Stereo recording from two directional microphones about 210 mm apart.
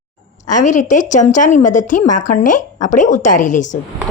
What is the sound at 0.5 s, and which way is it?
A woman's voice, 35° left (ahead or behind).